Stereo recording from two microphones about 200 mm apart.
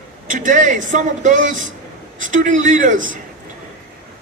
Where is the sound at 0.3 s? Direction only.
40° right (ahead or behind).